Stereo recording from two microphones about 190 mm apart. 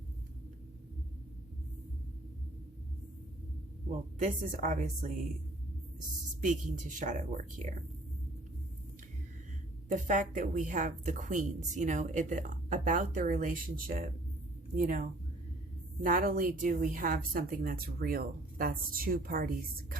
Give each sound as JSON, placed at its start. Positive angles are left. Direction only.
{"t": 4.2, "sound": "a woman's voice", "side_deg": -45}
{"t": 6.4, "sound": "a woman's voice", "side_deg": -40}
{"t": 9.9, "sound": "a woman's voice", "side_deg": -40}